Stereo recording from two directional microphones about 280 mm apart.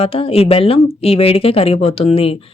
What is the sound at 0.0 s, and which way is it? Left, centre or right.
Speech, centre.